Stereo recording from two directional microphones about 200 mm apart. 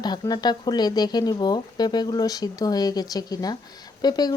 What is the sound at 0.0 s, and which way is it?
Speech, 20° left (ahead or behind).